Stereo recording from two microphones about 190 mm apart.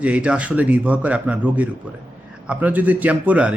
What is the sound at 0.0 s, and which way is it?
A man's voice, 5° right (ahead or behind).